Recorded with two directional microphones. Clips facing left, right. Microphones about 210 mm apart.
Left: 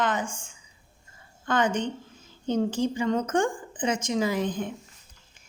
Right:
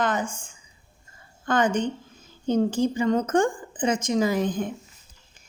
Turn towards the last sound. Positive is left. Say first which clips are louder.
# right 3 dB
turn(degrees=-45)  # may be behind; listen again after turning